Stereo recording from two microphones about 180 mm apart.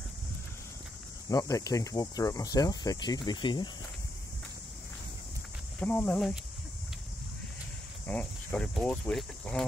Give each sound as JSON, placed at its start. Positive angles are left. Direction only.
{"t": 1.3, "sound": "speech", "side_deg": 20}
{"t": 5.8, "sound": "speech", "side_deg": 10}
{"t": 8.1, "sound": "speech", "side_deg": 10}